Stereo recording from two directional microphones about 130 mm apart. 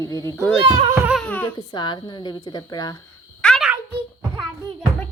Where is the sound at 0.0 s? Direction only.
25° left (ahead or behind).